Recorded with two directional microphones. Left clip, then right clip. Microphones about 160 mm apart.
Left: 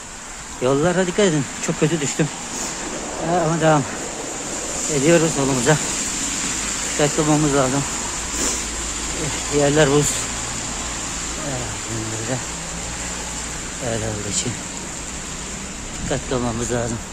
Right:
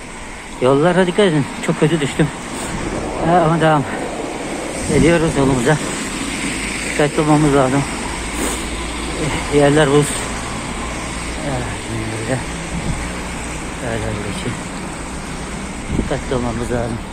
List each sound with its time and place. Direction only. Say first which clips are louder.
0.7 s speech: right 5 dB; 25° left (ahead or behind)
3.3 s speech: right 4 dB; 25° left (ahead or behind)
5.0 s speech: right 1 dB; 25° left (ahead or behind)
7.0 s speech: right 4 dB; 25° left (ahead or behind)
9.6 s speech: right 4 dB; 40° left (ahead or behind)